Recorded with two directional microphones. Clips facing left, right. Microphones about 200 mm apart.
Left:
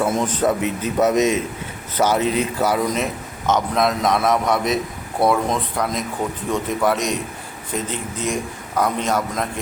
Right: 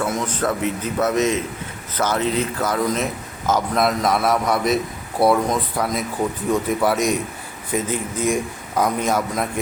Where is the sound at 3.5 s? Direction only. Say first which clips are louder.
Even; 5° right (ahead or behind).